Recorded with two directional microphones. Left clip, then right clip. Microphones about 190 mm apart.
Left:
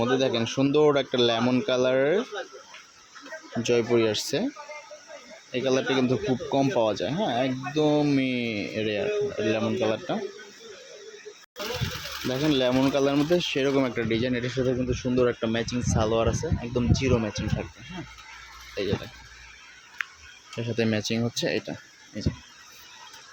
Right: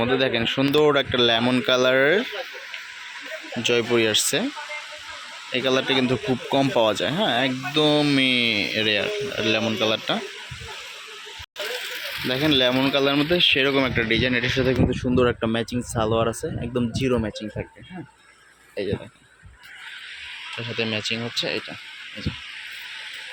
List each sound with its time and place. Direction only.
0.0 s speech: 5° left (ahead or behind)
3.6 s speech: 10° left (ahead or behind)
5.5 s speech: centre (ahead or behind)
12.3 s speech: centre (ahead or behind)
15.1 s speech: 30° right (ahead or behind)
15.6 s speech: 45° right (ahead or behind)
16.0 s speech: 20° right (ahead or behind)
18.8 s speech: 10° right (ahead or behind)
20.7 s speech: 35° left (ahead or behind)